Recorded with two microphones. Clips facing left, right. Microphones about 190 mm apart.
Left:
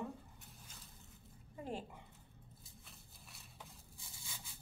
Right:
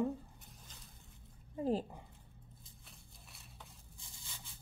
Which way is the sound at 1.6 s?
35° right (ahead or behind).